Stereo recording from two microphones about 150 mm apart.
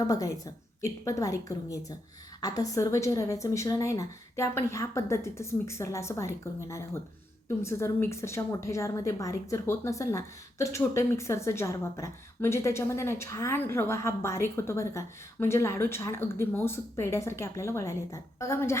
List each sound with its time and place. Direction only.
0.0 s a woman's voice: 25° left (ahead or behind)